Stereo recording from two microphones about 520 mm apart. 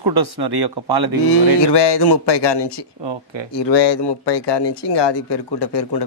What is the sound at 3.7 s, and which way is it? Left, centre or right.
Speech, left.